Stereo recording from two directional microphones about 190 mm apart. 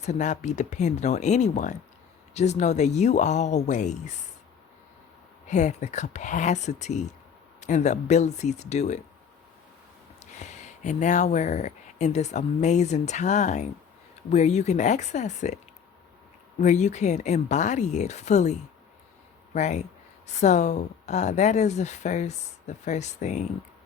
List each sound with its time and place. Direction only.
0.0 s speech: 40° left (ahead or behind)
5.5 s speech: 40° left (ahead or behind)
10.2 s speech: 35° left (ahead or behind)
16.6 s speech: 40° left (ahead or behind)
19.5 s speech: 40° left (ahead or behind)